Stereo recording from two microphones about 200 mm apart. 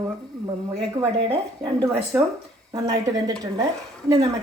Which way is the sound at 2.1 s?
5° right (ahead or behind).